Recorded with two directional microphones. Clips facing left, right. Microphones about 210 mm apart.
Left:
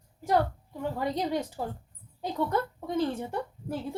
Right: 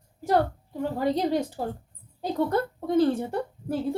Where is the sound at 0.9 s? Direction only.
30° right (ahead or behind).